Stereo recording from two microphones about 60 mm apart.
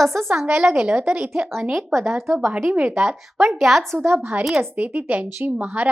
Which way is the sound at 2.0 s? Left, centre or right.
Right.